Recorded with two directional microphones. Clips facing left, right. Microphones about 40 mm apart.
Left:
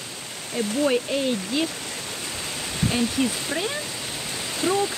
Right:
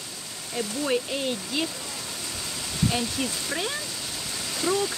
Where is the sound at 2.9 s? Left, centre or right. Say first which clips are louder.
Left 5 dB; centre.